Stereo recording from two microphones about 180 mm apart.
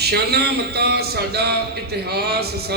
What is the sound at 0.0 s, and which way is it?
Speech, 65° right (ahead or behind).